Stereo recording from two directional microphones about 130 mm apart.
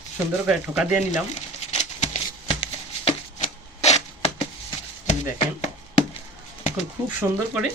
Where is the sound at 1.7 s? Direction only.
60° left (ahead or behind).